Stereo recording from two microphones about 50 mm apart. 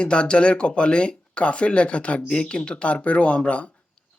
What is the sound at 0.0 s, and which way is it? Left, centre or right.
Speech, left.